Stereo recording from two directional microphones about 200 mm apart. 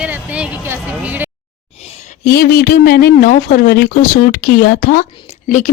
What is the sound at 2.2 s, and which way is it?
Speech, 50° left (ahead or behind).